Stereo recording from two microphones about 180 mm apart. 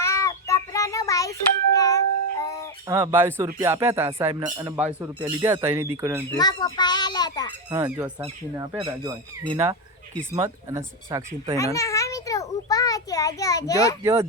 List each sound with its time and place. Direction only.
0.0 s a sound: 15° left (ahead or behind)
2.4 s music: 20° left (ahead or behind)
2.8 s speech: 15° right (ahead or behind)
6.3 s a child's voice: 20° left (ahead or behind)
7.7 s speech: 15° right (ahead or behind)
8.7 s speech: 25° right (ahead or behind)
10.3 s speech: 15° right (ahead or behind)
11.5 s a sound: 15° left (ahead or behind)
14.0 s speech: 15° right (ahead or behind)